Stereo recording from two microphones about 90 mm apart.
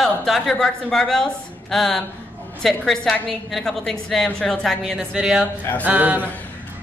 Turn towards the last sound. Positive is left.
turn(degrees=-15)  # may be behind; listen again after turning